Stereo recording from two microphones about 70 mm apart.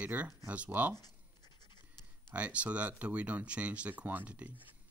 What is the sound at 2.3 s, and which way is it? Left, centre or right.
Speech, centre.